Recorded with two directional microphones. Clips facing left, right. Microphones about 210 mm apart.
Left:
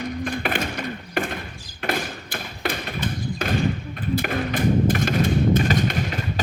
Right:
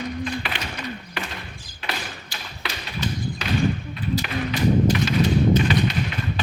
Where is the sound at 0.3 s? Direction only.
50° left (ahead or behind).